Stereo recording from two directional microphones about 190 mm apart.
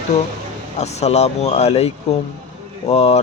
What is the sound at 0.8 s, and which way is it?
A man's voice, 35° left (ahead or behind).